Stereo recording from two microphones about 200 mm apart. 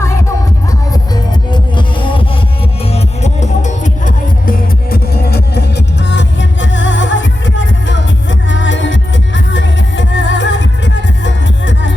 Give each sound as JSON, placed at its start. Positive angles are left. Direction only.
{"t": 1.1, "sound": "music", "side_deg": 20}
{"t": 2.9, "sound": "music", "side_deg": 35}